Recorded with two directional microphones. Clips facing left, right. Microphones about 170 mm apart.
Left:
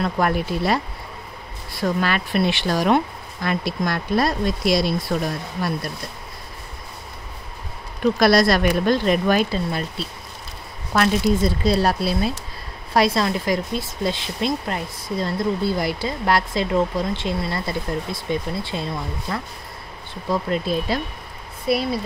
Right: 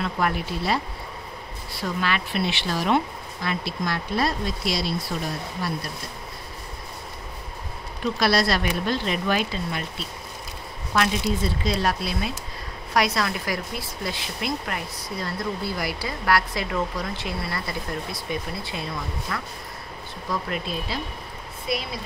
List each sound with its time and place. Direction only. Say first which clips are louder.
0.0 s speech: left 4 dB; 45° left (ahead or behind)
1.8 s speech: left 5 dB; 45° left (ahead or behind)
8.2 s speech: left 6 dB; 45° left (ahead or behind); by 20.7 s 30° left (ahead or behind)